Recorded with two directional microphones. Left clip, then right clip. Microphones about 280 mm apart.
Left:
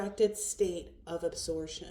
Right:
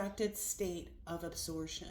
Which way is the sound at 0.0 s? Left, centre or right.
Right.